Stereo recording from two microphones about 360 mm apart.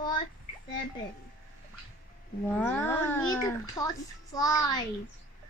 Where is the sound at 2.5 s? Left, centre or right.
Centre.